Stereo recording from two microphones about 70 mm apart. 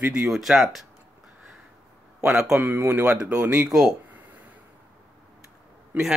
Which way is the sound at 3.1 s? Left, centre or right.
Centre.